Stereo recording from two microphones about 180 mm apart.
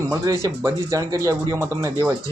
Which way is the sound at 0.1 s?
20° right (ahead or behind).